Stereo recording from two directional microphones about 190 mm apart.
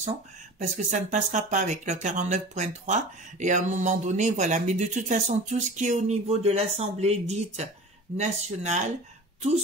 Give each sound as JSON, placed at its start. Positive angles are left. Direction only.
{"t": 0.6, "sound": "speech", "side_deg": -40}